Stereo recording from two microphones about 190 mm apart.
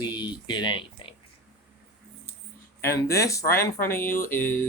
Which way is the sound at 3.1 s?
15° left (ahead or behind).